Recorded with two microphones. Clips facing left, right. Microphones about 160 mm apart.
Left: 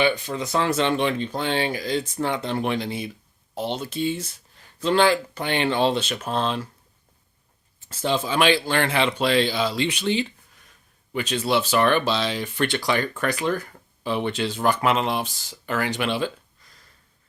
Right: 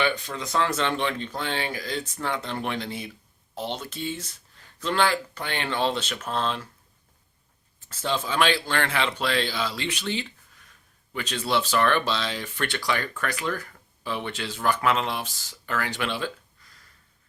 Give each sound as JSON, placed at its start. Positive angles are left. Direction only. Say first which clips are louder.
{"t": 0.0, "sound": "speech", "louder": "left 4 dB", "side_deg": 15}
{"t": 4.8, "sound": "speech", "louder": "left 5 dB", "side_deg": 20}
{"t": 7.9, "sound": "speech", "louder": "left 4 dB", "side_deg": 15}